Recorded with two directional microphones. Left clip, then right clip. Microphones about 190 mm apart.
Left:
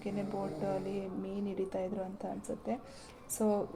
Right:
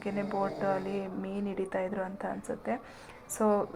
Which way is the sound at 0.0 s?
5° left (ahead or behind).